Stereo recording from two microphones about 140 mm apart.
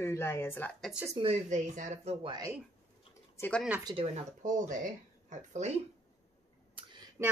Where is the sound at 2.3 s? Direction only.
25° right (ahead or behind).